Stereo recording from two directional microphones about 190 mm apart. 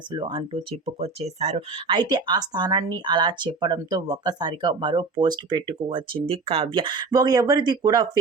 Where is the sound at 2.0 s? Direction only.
20° right (ahead or behind).